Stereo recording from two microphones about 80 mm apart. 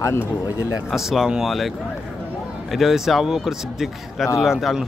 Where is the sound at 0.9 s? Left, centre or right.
Centre.